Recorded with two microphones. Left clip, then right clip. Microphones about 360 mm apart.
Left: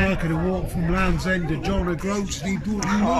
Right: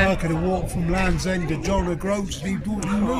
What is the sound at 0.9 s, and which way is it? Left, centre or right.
A man's voice, centre.